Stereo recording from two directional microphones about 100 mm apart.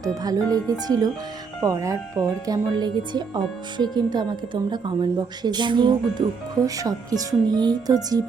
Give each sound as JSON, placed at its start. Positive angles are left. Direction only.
{"t": 0.0, "sound": "speech", "side_deg": -40}
{"t": 2.7, "sound": "a woman's voice", "side_deg": -45}